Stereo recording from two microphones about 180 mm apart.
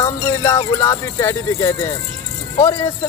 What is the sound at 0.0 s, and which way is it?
Speech, 20° left (ahead or behind).